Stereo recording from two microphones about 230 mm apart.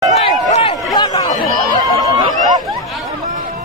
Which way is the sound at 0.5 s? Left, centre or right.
Left.